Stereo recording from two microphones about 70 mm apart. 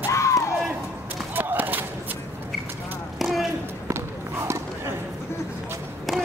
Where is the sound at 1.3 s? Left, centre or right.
Right.